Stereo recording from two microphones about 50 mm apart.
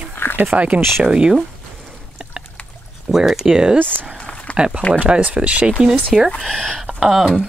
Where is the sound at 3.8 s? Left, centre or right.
Right.